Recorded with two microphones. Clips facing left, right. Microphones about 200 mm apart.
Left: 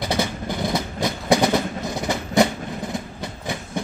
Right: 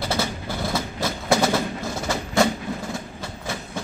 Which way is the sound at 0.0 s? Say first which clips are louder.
Left 2 dB; 15° left (ahead or behind).